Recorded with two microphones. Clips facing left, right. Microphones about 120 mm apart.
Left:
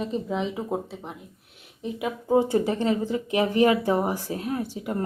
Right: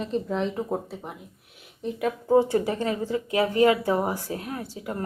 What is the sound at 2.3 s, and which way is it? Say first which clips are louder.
Speech: even; 20° left (ahead or behind).